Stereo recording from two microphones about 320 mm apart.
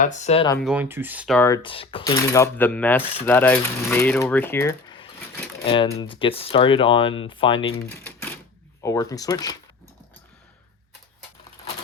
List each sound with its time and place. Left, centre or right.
0.0 s speech: left
0.6 s speech: centre
7.9 s typewriter: centre
8.8 s speech: centre